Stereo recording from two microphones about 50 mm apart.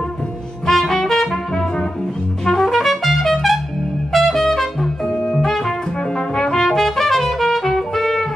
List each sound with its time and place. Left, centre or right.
0.7 s brass instrument: centre
2.4 s trumpet: centre
5.0 s music: centre
5.4 s trumpet: centre